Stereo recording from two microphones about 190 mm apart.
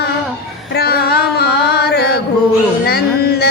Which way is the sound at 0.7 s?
55° left (ahead or behind).